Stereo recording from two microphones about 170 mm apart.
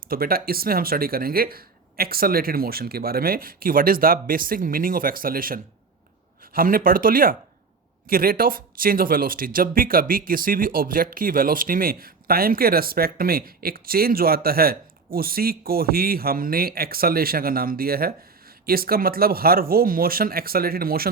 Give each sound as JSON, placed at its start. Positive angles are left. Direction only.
{"t": 0.1, "sound": "speech", "side_deg": -60}